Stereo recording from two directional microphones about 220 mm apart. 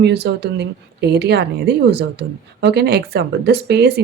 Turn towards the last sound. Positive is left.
turn(degrees=-50)  # may be behind; listen again after turning